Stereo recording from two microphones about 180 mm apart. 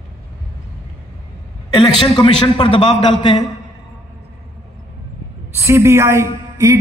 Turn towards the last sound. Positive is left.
turn(degrees=-15)  # may be behind; listen again after turning